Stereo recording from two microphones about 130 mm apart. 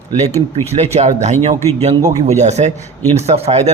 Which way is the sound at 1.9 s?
35° right (ahead or behind).